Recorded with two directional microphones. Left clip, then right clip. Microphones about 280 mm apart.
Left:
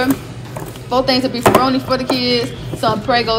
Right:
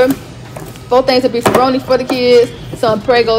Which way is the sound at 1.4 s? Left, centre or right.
Centre.